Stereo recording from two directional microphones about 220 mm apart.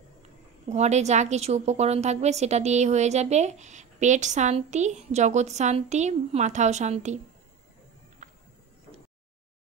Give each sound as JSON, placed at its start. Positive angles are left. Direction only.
{"t": 0.7, "sound": "a woman's voice", "side_deg": -30}